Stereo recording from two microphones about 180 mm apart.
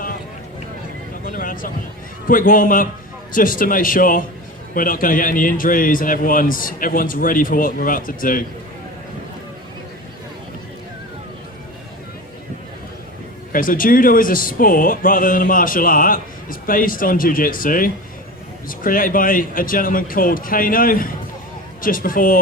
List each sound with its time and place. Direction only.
1.2 s a sound: 50° left (ahead or behind)
2.2 s speech: 50° left (ahead or behind)
13.5 s speech: 50° left (ahead or behind)